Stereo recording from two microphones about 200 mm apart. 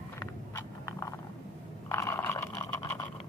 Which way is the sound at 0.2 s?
15° left (ahead or behind).